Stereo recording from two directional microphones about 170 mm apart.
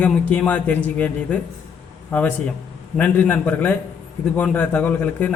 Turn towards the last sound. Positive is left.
turn(degrees=10)  # may be behind; listen again after turning